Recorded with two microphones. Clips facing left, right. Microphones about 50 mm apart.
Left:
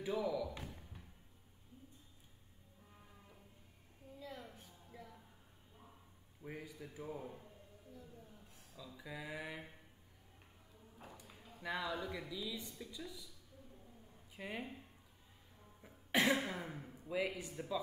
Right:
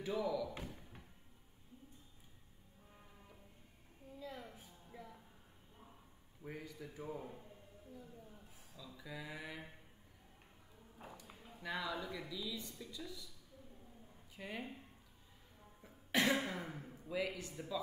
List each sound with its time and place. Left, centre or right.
0.0 s speech: centre
4.2 s a sound: centre
6.4 s a man's voice: centre
8.0 s speech: centre
8.7 s speech: centre
11.2 s a sound: centre
11.6 s speech: centre
14.3 s speech: centre
16.1 s cough: centre
16.3 s a man's voice: centre
16.9 s a sound: centre
17.2 s speech: centre